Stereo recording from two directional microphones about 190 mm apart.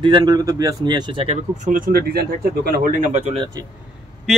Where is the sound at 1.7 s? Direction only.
45° right (ahead or behind).